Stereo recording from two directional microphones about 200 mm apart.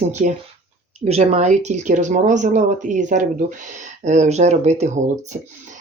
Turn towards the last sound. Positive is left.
turn(degrees=-35)  # may be behind; listen again after turning